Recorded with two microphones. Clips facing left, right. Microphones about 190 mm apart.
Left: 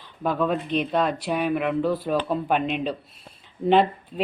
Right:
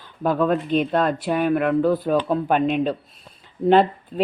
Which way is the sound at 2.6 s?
45° right (ahead or behind).